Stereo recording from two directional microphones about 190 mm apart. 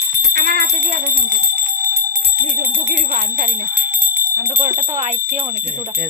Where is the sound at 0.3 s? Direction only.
55° right (ahead or behind).